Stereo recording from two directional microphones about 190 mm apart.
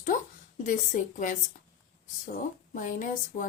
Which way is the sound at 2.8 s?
45° left (ahead or behind).